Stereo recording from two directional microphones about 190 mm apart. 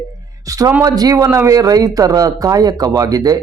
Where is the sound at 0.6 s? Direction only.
15° right (ahead or behind).